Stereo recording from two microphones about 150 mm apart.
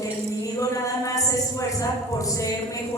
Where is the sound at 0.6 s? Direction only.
20° left (ahead or behind).